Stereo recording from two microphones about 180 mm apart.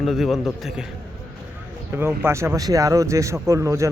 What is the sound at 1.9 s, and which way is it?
Speech, 10° right (ahead or behind).